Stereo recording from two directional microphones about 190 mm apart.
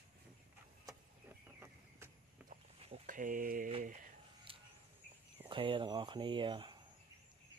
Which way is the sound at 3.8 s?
45° right (ahead or behind).